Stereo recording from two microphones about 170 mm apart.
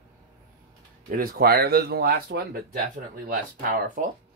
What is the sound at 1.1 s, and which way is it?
Speech, 60° right (ahead or behind).